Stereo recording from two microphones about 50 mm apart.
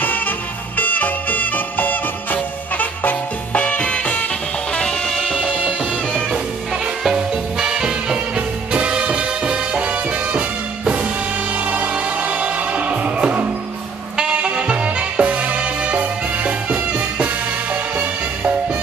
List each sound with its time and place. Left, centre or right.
0.0 s music: left
4.7 s music: centre
5.1 s music: centre
7.0 s music: centre; by 10.4 s right
11.5 s music: right